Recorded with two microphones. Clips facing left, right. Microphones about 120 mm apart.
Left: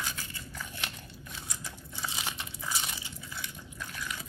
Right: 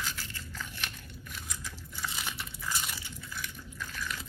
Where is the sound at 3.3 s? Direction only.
25° left (ahead or behind).